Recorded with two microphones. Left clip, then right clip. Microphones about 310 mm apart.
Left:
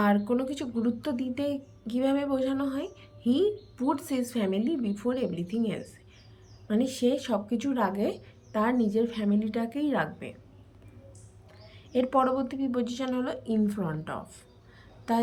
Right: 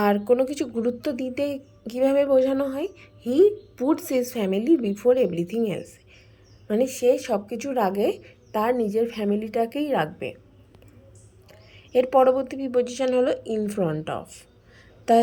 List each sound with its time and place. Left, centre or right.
0.0 s speech: centre
11.9 s speech: centre